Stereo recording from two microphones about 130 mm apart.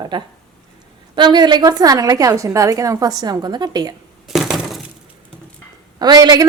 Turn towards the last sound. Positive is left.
turn(degrees=-30)  # may be behind; listen again after turning